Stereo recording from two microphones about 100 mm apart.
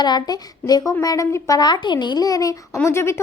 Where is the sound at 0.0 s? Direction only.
45° left (ahead or behind).